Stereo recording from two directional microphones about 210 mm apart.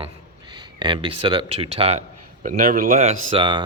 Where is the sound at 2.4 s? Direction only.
40° right (ahead or behind); by 3.6 s 25° right (ahead or behind).